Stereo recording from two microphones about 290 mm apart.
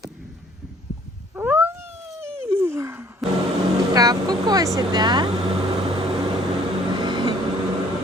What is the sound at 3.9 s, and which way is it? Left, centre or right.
Speech, centre.